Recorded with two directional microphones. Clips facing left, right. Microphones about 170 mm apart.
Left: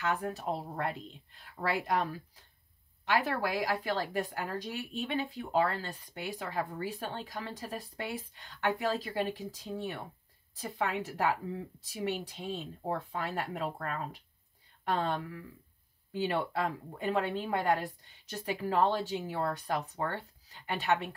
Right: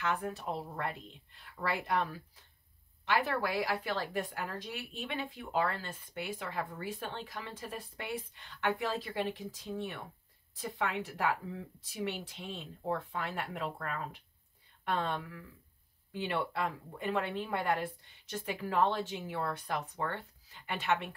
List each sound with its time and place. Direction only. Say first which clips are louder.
0.2 s speech: left 2 dB; 40° left (ahead or behind)
3.3 s speech: left 1 dB; 40° left (ahead or behind)